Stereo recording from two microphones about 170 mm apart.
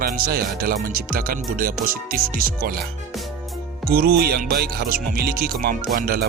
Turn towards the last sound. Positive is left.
turn(degrees=-60)  # may be behind; listen again after turning